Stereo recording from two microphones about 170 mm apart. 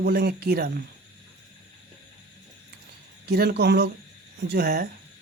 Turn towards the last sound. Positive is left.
turn(degrees=-65)  # may be behind; listen again after turning